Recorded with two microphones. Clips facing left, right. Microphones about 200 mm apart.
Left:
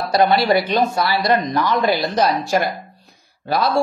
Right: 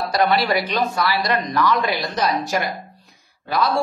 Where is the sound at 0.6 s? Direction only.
40° left (ahead or behind).